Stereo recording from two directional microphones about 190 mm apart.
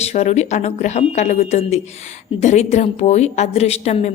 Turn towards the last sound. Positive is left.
turn(degrees=35)  # may be behind; listen again after turning